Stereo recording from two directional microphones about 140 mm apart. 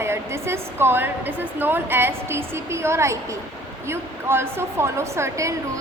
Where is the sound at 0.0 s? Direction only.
20° right (ahead or behind).